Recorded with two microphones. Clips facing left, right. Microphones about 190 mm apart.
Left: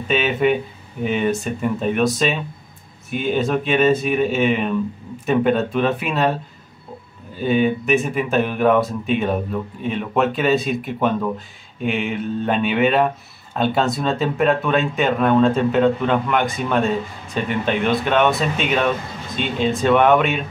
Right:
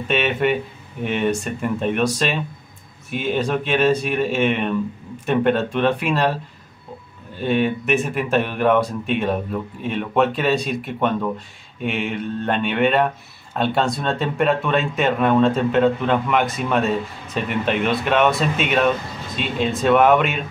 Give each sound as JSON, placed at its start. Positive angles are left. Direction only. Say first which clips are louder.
{"t": 0.1, "sound": "speech", "louder": "left 2 dB", "side_deg": 0}